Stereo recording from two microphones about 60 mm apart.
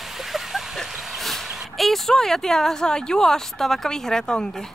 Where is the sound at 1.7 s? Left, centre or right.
Centre.